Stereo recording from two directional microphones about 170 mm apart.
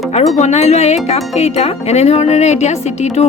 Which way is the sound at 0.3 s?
40° left (ahead or behind).